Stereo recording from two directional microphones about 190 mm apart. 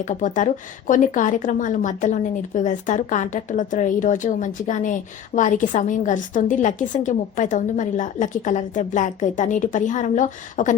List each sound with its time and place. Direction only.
0.1 s a woman's voice: 40° left (ahead or behind)